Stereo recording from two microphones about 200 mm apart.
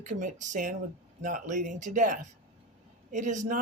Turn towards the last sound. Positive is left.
turn(degrees=-40)  # may be behind; listen again after turning